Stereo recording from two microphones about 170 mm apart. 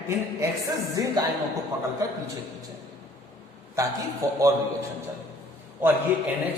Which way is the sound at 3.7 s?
20° right (ahead or behind).